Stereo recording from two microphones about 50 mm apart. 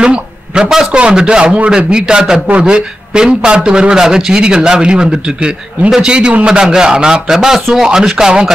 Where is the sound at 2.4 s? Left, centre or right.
Right.